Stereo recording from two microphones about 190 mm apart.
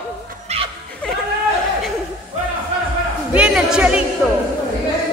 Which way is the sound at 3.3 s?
5° right (ahead or behind).